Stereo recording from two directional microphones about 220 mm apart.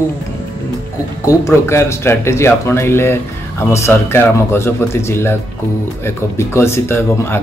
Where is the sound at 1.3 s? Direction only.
15° left (ahead or behind).